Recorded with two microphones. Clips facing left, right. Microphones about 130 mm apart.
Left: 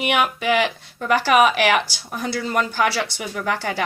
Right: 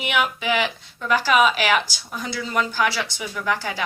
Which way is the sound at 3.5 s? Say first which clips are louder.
Left 3 dB; 60° left (ahead or behind).